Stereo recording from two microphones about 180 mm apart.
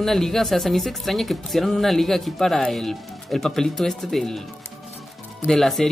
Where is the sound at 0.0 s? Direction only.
Centre (ahead or behind).